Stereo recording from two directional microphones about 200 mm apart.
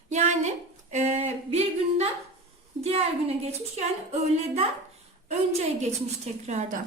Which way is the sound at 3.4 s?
35° right (ahead or behind).